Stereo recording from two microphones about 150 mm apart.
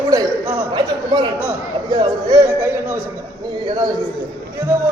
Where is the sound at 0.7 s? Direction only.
30° right (ahead or behind).